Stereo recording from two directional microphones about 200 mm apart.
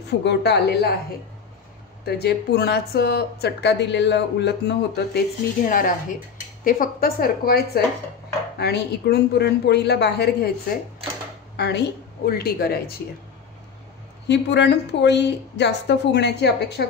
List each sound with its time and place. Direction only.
0.0 s a woman's voice: 55° left (ahead or behind)
2.0 s a woman's voice: 55° left (ahead or behind)
5.7 s a woman's voice: 40° left (ahead or behind)
14.2 s a woman's voice: 60° left (ahead or behind)